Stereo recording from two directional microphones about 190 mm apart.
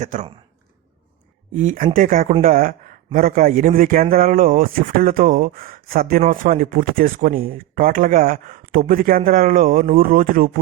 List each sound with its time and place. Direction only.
0.0 s speech: 40° right (ahead or behind)
1.5 s a man's voice: 45° right (ahead or behind)